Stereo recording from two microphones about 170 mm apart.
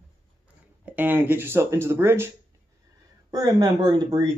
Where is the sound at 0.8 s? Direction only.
10° right (ahead or behind).